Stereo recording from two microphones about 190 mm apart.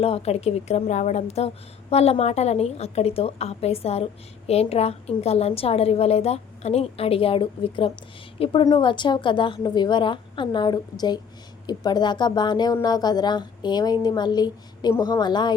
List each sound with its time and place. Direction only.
0.0 s a woman's voice: 30° left (ahead or behind)